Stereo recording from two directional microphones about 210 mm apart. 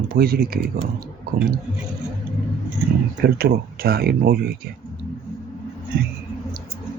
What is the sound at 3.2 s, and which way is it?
Speech, 45° right (ahead or behind).